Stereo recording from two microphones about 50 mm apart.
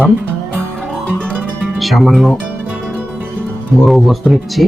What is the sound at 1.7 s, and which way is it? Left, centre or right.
Speech, centre.